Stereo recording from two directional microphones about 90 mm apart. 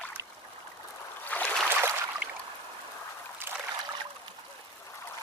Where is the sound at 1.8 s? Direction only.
25° right (ahead or behind).